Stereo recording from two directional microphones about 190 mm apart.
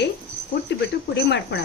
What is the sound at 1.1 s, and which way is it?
Speech, 65° left (ahead or behind).